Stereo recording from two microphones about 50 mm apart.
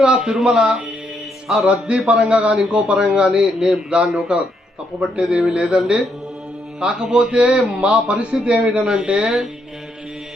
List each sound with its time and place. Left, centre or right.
0.0 s a man's voice: centre
8.8 s a man's voice: centre